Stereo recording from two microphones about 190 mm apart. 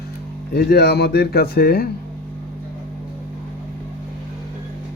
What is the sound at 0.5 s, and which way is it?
Speech, 60° left (ahead or behind).